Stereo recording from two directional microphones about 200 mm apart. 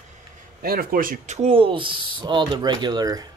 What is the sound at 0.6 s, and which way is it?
Speech, 45° right (ahead or behind).